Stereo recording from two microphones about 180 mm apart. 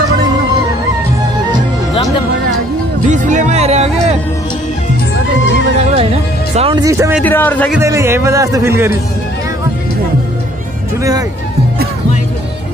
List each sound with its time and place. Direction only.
3.1 s music: 45° right (ahead or behind)
5.9 s music: 35° right (ahead or behind)
6.8 s a man's voice: 15° right (ahead or behind)
7.2 s a man's voice: 10° left (ahead or behind)
7.8 s a man's voice: 15° right (ahead or behind)
11.0 s speech: 20° right (ahead or behind)